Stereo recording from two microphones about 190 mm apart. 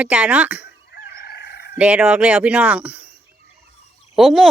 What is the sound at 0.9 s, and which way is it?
Fowl, 55° left (ahead or behind).